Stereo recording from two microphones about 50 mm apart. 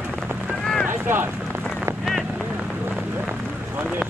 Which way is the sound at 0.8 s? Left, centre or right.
Right.